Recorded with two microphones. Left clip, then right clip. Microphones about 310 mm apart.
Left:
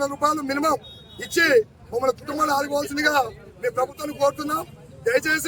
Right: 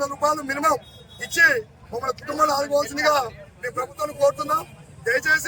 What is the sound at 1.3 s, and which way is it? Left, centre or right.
Speech, centre.